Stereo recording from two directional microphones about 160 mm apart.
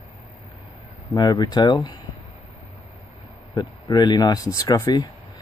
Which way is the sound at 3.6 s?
25° left (ahead or behind).